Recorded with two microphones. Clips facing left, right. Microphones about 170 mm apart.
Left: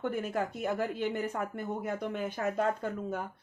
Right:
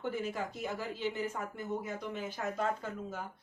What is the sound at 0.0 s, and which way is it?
Speech, 55° left (ahead or behind).